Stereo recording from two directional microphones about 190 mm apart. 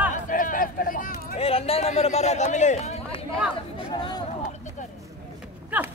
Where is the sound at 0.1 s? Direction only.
45° left (ahead or behind).